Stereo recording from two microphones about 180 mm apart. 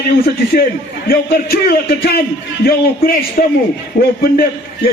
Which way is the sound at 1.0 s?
55° left (ahead or behind).